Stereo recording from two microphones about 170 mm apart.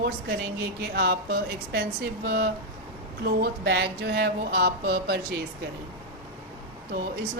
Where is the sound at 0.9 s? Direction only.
65° right (ahead or behind).